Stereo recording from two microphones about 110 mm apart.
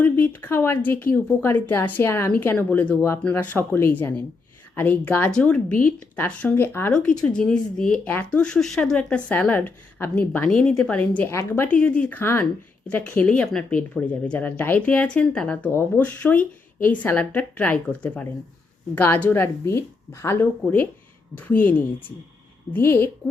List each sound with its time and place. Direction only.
0.0 s speech: 20° left (ahead or behind)
6.9 s speech: 10° left (ahead or behind)
11.2 s speech: 25° left (ahead or behind)